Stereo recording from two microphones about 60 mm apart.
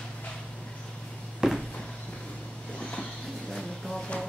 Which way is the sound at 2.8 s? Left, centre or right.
Centre.